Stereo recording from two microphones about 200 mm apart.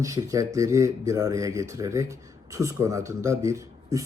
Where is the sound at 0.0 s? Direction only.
15° right (ahead or behind).